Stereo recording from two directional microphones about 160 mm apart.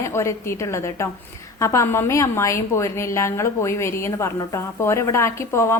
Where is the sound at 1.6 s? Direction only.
15° left (ahead or behind).